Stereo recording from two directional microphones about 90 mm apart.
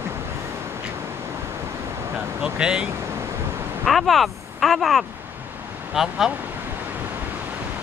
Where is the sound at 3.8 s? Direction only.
Centre (ahead or behind).